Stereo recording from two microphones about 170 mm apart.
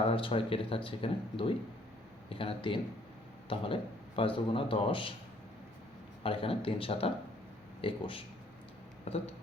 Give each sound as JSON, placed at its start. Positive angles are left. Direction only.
{"t": 0.1, "sound": "a man's voice", "side_deg": 30}
{"t": 6.2, "sound": "a man's voice", "side_deg": 30}